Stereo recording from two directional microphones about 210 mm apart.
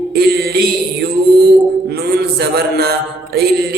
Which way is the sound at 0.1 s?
50° right (ahead or behind).